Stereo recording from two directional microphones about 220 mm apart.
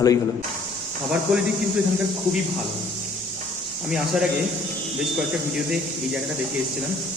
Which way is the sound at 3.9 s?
Centre (ahead or behind).